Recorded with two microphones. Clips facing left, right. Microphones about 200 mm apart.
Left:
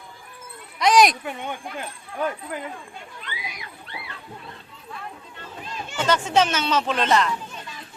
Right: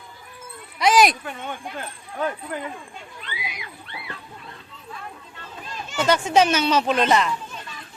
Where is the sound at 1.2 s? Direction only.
15° left (ahead or behind).